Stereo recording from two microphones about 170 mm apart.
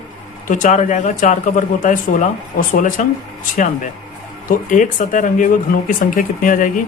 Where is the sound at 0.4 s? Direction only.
50° left (ahead or behind).